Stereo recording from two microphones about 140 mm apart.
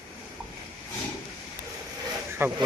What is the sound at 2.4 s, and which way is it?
Speech, 15° right (ahead or behind).